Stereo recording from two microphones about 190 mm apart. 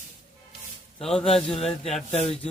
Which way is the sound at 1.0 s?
5° left (ahead or behind).